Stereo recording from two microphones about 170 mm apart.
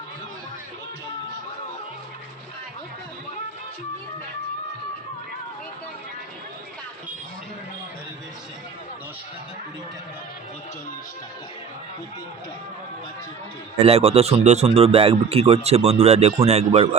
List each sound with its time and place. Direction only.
13.7 s speech: 35° right (ahead or behind)